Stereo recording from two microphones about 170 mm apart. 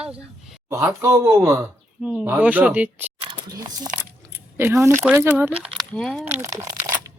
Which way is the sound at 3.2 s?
25° right (ahead or behind).